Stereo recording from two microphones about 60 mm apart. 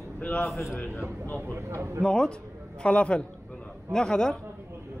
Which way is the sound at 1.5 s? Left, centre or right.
Right.